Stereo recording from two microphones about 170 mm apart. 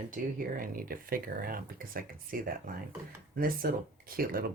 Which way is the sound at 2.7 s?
55° right (ahead or behind).